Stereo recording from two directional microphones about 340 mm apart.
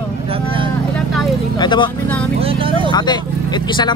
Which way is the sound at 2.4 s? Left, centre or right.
Centre.